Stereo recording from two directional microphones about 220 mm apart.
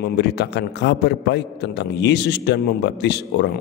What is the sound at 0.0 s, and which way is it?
A man's voice, 50° left (ahead or behind).